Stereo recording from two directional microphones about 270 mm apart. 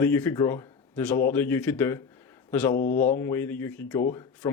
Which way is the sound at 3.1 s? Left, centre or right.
Centre.